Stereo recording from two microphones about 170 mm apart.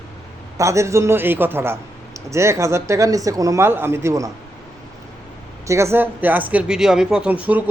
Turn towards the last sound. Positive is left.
turn(degrees=-10)  # may be behind; listen again after turning